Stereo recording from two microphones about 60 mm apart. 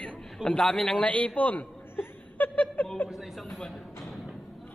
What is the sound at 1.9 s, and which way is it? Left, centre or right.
Chuckle, left.